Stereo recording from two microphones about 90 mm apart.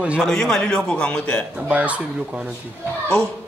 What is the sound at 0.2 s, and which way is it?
A man's voice, 5° left (ahead or behind).